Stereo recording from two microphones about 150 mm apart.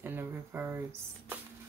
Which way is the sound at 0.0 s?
15° right (ahead or behind).